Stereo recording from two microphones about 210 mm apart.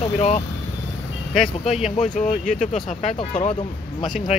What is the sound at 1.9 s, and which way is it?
Speech, 35° left (ahead or behind).